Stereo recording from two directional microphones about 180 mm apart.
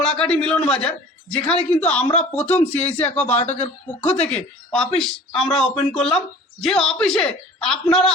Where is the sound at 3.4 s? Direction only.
40° left (ahead or behind).